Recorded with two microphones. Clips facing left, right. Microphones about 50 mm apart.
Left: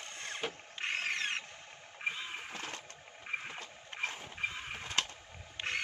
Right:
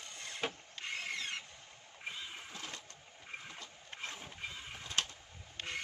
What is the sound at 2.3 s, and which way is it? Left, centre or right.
Vehicle, left.